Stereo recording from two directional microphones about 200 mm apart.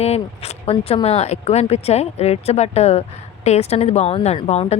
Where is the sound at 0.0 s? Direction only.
30° left (ahead or behind).